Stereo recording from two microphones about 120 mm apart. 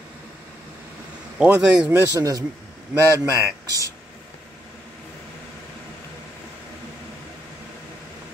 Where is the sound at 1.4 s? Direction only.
10° right (ahead or behind).